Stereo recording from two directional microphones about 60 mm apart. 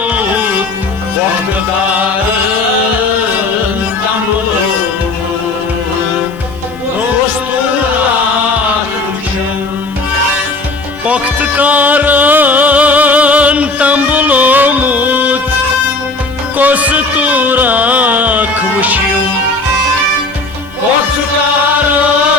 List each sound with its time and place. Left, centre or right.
0.0 s music: right
11.0 s music: right
16.6 s music: right